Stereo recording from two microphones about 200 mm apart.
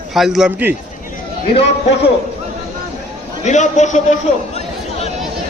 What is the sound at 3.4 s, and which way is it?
Speech, 35° left (ahead or behind).